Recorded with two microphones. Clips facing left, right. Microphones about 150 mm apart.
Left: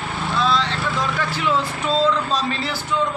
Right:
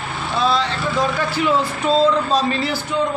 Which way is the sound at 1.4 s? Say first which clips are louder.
Right 4 dB; 40° right (ahead or behind).